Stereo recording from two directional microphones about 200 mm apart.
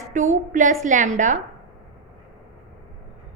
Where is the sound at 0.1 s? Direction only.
40° right (ahead or behind).